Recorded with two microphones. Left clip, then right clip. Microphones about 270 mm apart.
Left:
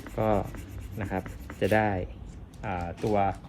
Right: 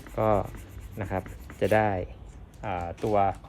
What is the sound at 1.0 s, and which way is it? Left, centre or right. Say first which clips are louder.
Speech: right 1 dB; right.